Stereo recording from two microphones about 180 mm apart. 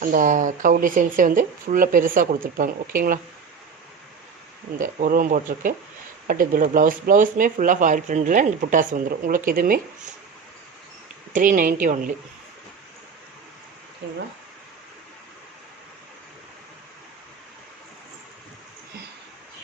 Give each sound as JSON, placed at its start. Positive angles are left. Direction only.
{"t": 0.0, "sound": "speech", "side_deg": -50}
{"t": 4.8, "sound": "speech", "side_deg": -50}
{"t": 11.3, "sound": "speech", "side_deg": -50}